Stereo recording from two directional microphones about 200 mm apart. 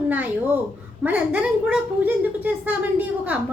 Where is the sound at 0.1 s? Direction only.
10° right (ahead or behind).